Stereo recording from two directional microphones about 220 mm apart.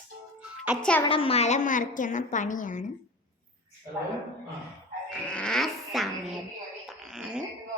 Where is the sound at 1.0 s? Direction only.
25° left (ahead or behind).